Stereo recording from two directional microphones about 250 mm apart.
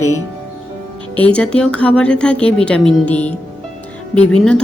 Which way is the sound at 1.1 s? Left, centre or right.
Centre.